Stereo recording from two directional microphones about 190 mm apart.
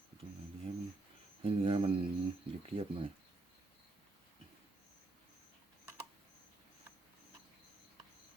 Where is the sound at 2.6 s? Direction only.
30° right (ahead or behind).